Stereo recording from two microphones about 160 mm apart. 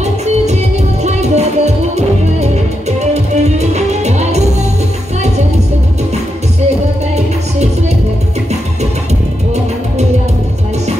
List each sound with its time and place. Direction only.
1.0 s music: 45° right (ahead or behind)